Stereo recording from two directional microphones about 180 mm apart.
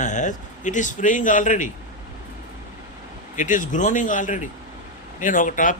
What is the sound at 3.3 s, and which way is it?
Speech, 45° left (ahead or behind).